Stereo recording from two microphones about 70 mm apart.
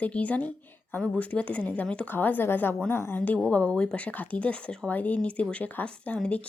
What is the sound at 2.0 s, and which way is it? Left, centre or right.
A woman's voice, left.